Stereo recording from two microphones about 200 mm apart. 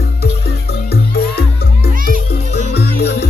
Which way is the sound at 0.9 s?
50° left (ahead or behind).